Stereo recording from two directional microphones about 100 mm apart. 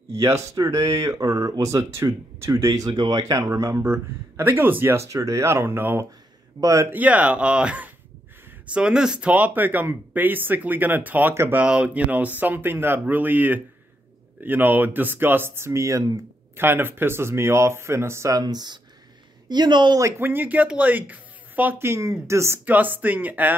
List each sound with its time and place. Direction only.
0.1 s speech: 30° right (ahead or behind)
6.6 s speech: 35° right (ahead or behind)
6.9 s speech: 15° right (ahead or behind)
11.6 s speech: 10° right (ahead or behind); by 18.3 s 25° right (ahead or behind)
18.3 s speech: 45° right (ahead or behind)
20.0 s speech: 25° right (ahead or behind)
22.7 s speech: 20° right (ahead or behind)